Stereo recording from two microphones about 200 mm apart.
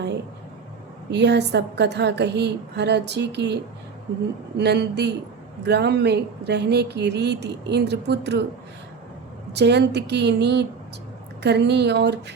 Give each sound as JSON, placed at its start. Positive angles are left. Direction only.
{"t": 1.1, "sound": "speech", "side_deg": -55}
{"t": 9.5, "sound": "speech", "side_deg": -55}